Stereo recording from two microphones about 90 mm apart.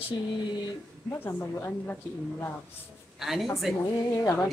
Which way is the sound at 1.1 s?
25° left (ahead or behind).